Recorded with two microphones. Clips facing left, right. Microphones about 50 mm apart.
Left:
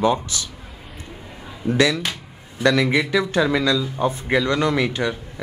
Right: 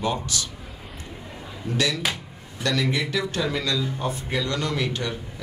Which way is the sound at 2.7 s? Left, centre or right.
Left.